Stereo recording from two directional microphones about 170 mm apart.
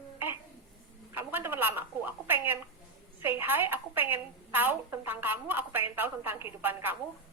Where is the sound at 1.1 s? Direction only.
15° right (ahead or behind).